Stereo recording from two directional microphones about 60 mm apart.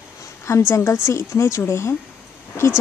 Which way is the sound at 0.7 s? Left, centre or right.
Left.